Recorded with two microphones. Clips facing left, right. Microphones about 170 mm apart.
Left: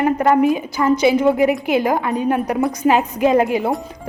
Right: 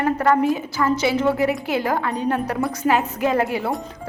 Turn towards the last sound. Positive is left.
turn(degrees=15)  # may be behind; listen again after turning